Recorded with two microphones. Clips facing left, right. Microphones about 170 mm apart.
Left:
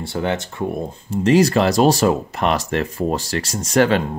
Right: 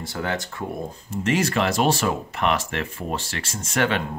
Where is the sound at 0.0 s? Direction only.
25° left (ahead or behind).